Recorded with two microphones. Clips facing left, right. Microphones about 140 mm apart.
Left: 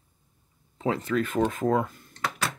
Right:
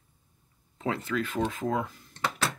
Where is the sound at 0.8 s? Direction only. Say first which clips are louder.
Left 4 dB; 40° left (ahead or behind).